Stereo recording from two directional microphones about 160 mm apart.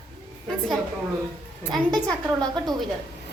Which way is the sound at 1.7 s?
5° left (ahead or behind).